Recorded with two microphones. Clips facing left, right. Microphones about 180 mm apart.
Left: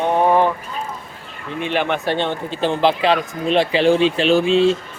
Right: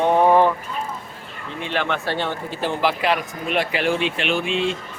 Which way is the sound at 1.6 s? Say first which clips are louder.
Left 4 dB; 15° left (ahead or behind).